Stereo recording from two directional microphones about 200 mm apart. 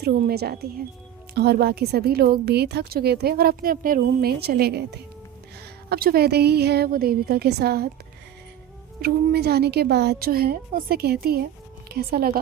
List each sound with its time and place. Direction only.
0.0 s a woman's voice: 50° right (ahead or behind)
9.0 s a woman's voice: 50° right (ahead or behind)